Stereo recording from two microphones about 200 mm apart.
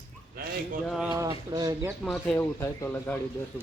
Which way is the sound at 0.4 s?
45° right (ahead or behind).